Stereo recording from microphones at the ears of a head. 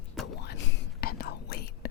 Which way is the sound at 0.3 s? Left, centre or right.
Left.